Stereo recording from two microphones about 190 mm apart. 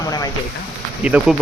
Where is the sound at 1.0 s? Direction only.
5° right (ahead or behind).